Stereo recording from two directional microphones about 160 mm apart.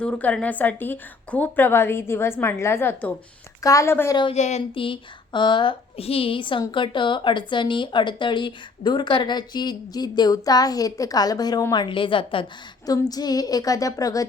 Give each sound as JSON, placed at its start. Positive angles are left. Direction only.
{"t": 0.0, "sound": "a woman's voice", "side_deg": 10}
{"t": 4.4, "sound": "speech", "side_deg": 45}
{"t": 4.7, "sound": "a woman's voice", "side_deg": 35}